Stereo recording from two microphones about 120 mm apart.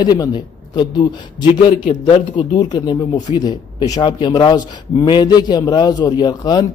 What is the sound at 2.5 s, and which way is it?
A man's voice, 35° left (ahead or behind).